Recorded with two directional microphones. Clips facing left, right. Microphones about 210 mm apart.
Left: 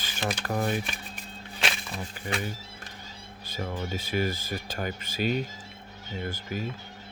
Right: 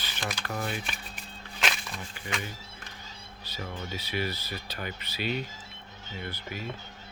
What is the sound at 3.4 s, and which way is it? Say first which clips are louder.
Speech: left 5 dB; 50° left (ahead or behind).